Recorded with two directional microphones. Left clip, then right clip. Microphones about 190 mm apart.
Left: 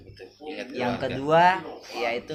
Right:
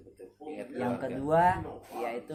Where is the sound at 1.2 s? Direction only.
25° left (ahead or behind).